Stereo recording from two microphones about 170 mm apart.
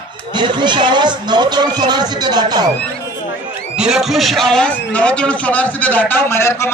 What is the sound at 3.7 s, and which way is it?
A man's voice, 5° right (ahead or behind).